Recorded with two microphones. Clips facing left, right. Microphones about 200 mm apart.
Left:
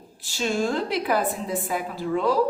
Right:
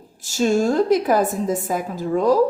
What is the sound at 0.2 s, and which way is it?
A woman's voice, 45° right (ahead or behind).